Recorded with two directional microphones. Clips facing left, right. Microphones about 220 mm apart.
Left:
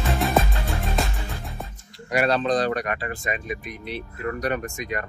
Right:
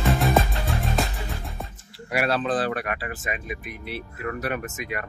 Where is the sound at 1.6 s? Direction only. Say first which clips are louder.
Even; 5° right (ahead or behind).